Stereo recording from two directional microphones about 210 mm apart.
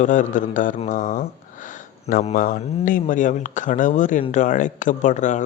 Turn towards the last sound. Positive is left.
turn(degrees=35)  # may be behind; listen again after turning